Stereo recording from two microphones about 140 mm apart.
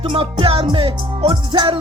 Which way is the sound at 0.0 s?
40° right (ahead or behind).